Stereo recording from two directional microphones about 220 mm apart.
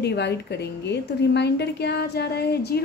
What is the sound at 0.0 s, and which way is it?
A woman's voice, 50° left (ahead or behind).